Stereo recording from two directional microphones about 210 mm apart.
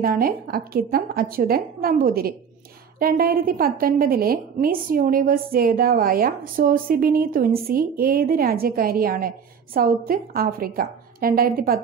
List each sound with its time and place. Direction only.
0.0 s a woman's voice: 45° right (ahead or behind)